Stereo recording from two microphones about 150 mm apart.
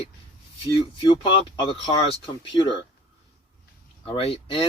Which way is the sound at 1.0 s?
30° left (ahead or behind).